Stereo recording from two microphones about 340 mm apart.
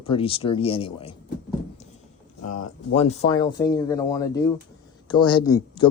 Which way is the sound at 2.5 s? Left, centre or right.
Centre.